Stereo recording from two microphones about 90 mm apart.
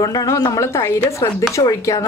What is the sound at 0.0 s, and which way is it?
Speech, 40° left (ahead or behind).